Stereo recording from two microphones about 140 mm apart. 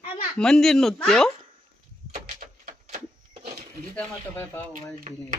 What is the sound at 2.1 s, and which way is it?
Door, 50° right (ahead or behind).